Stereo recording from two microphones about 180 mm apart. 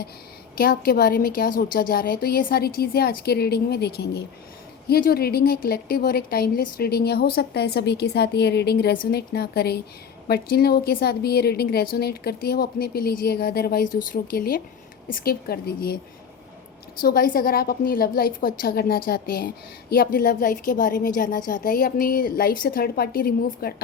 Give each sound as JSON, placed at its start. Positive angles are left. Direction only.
{"t": 0.5, "sound": "a woman's voice", "side_deg": 55}
{"t": 17.0, "sound": "a woman's voice", "side_deg": 55}